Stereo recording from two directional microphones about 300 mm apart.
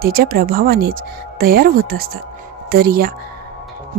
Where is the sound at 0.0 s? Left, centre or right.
Right.